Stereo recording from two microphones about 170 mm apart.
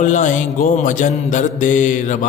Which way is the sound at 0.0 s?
45° left (ahead or behind).